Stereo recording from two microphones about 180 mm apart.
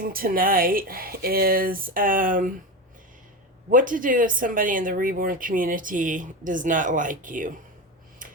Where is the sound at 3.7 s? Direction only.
50° right (ahead or behind).